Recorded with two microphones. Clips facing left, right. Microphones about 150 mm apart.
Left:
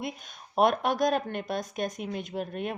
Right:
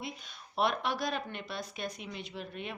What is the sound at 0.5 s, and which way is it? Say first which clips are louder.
A woman's voice: left 7 dB; 50° left (ahead or behind).